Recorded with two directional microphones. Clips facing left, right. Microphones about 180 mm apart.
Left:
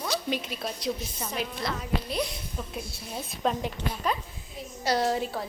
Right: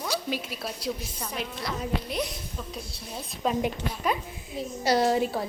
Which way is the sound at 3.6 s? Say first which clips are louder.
Right 3 dB; 10° right (ahead or behind).